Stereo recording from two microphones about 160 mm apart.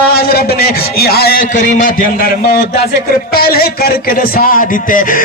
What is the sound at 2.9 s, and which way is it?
Speech, 70° left (ahead or behind).